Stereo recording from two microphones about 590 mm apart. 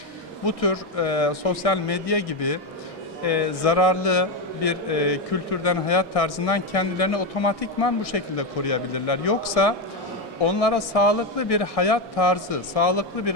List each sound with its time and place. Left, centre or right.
0.4 s a man's voice: left